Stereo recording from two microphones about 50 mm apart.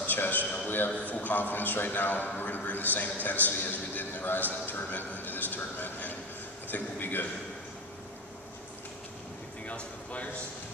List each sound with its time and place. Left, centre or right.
0.0 s a man's voice: left
9.7 s speech: left